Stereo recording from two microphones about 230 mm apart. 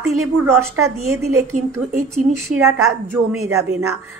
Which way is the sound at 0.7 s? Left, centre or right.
Right.